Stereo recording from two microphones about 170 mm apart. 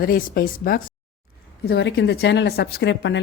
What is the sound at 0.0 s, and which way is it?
Speech, 60° left (ahead or behind).